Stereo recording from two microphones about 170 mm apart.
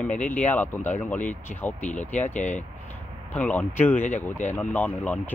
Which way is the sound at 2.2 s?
45° left (ahead or behind).